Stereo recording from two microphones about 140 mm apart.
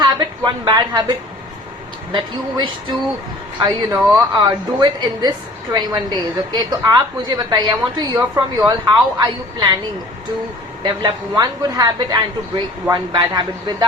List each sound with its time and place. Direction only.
0.0 s a woman's voice: 30° right (ahead or behind)
2.1 s a woman's voice: 35° right (ahead or behind)
10.8 s a woman's voice: 30° right (ahead or behind)